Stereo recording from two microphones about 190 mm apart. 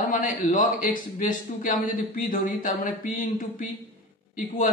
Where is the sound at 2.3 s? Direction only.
45° left (ahead or behind).